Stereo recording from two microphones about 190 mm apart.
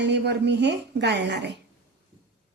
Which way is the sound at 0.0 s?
65° right (ahead or behind).